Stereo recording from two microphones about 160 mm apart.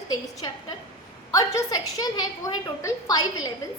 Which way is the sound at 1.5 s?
25° left (ahead or behind).